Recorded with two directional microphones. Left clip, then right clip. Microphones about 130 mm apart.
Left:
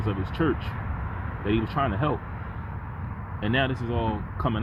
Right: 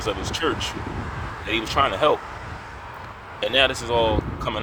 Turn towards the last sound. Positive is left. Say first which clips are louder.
# right 5 dB
turn(degrees=-25)  # may be behind; listen again after turning